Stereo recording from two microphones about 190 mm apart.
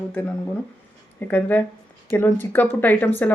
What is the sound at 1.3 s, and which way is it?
Speech, 10° left (ahead or behind).